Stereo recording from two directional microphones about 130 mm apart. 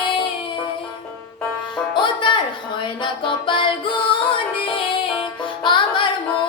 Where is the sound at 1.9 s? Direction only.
40° left (ahead or behind).